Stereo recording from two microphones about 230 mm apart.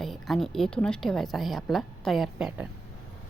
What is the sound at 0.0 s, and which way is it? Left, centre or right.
Speech, centre.